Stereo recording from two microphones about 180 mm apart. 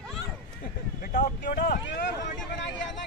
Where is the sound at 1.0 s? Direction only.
45° left (ahead or behind).